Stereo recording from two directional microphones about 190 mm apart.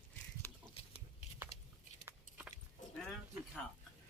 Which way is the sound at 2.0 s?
10° right (ahead or behind).